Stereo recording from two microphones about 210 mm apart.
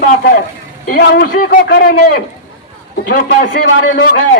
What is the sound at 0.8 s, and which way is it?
A man's voice, 45° left (ahead or behind).